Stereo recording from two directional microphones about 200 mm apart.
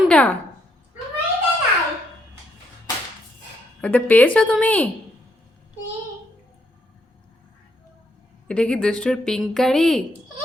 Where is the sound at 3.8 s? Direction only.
10° left (ahead or behind).